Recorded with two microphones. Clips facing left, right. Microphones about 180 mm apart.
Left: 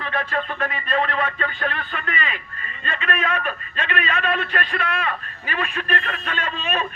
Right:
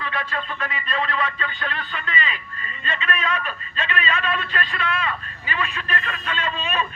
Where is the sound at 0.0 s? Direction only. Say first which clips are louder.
Left 3 dB; 50° left (ahead or behind).